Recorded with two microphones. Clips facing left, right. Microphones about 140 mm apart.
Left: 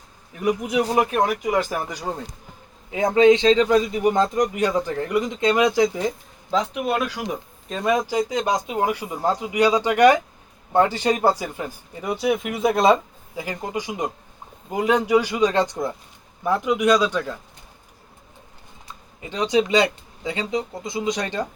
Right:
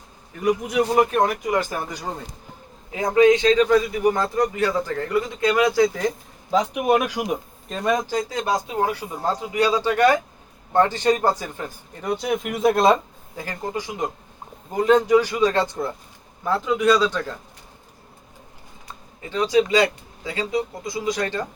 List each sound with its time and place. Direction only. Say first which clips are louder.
0.7 s speech: right 2 dB; 5° left (ahead or behind)
2.9 s speech: left 1 dB; 25° left (ahead or behind)
6.5 s speech: right 3 dB; 15° right (ahead or behind)
7.7 s speech: left 1 dB; centre (ahead or behind)
13.3 s speech: left 1 dB; 15° left (ahead or behind)
19.3 s speech: right 1 dB; 20° left (ahead or behind)